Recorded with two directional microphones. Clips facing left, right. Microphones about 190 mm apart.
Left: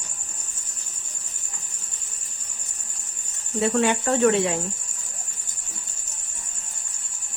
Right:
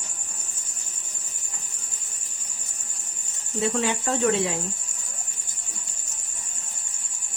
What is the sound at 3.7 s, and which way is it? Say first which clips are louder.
Speech: left 7 dB; 60° left (ahead or behind).